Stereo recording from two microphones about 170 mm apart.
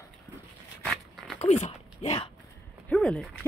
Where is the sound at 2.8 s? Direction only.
5° left (ahead or behind).